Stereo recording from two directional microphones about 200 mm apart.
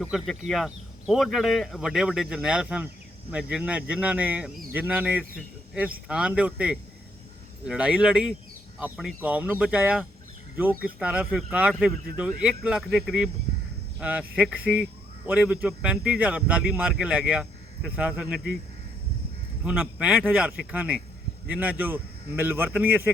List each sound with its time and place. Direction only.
0.0 s speech: centre (ahead or behind)
19.6 s speech: 5° right (ahead or behind)